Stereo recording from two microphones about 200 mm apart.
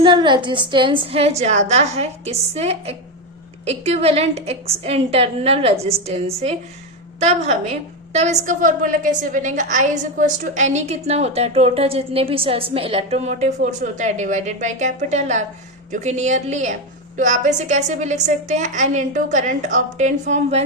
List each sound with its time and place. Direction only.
0.0 s a woman's voice: 25° right (ahead or behind)